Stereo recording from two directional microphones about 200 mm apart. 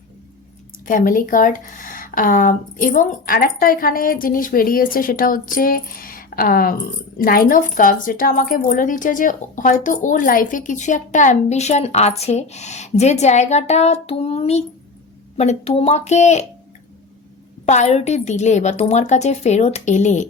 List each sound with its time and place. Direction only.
0.9 s speech: 45° left (ahead or behind)
17.7 s speech: 35° left (ahead or behind)